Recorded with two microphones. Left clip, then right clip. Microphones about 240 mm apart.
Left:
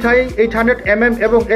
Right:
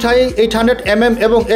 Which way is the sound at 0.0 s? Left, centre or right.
Right.